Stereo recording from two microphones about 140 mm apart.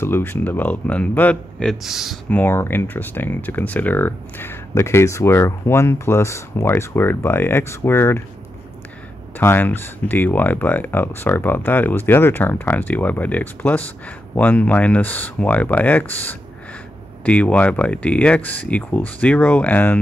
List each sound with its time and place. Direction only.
0.0 s speech: 15° left (ahead or behind); by 2.1 s centre (ahead or behind)
2.2 s speech: 15° left (ahead or behind)
9.4 s speech: 15° left (ahead or behind)